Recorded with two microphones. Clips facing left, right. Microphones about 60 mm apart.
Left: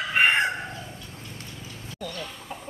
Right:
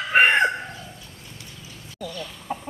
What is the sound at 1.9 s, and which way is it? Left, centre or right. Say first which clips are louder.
Chicken: right 2 dB; left.